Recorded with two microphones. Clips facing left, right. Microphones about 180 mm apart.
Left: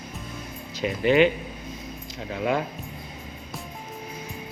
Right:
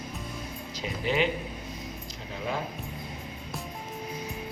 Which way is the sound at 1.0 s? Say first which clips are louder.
Left 8 dB; 65° left (ahead or behind).